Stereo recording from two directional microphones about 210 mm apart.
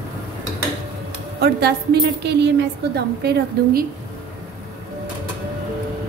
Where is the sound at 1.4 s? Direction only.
50° right (ahead or behind).